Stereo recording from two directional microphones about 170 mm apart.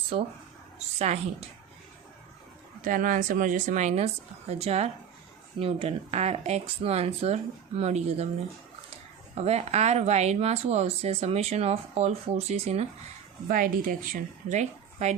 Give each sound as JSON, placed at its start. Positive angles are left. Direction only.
{"t": 0.1, "sound": "speech", "side_deg": -40}
{"t": 2.8, "sound": "speech", "side_deg": -55}
{"t": 9.3, "sound": "speech", "side_deg": -40}
{"t": 13.5, "sound": "speech", "side_deg": -55}